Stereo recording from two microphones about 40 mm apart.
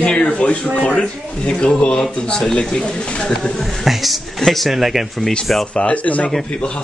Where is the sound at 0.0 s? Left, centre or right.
Left.